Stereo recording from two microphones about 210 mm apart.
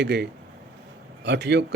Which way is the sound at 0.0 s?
55° right (ahead or behind).